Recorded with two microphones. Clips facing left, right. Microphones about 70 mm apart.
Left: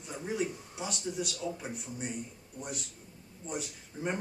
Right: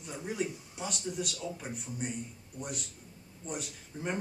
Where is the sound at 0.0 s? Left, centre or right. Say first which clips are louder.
Left 1 dB; centre.